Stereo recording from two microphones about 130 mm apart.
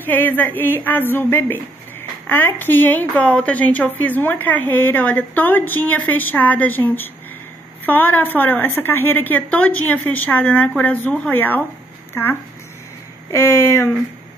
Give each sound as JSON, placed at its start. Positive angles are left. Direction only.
{"t": 0.0, "sound": "a woman's voice", "side_deg": 15}